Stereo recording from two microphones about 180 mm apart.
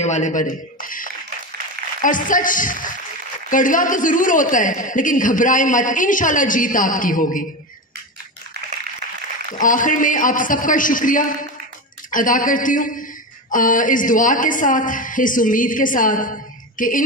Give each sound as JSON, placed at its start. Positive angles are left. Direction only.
{"t": 0.0, "sound": "a man's voice", "side_deg": 40}
{"t": 9.6, "sound": "a man's voice", "side_deg": 45}